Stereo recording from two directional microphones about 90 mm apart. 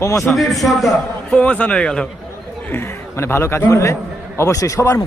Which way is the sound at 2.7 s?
30° left (ahead or behind).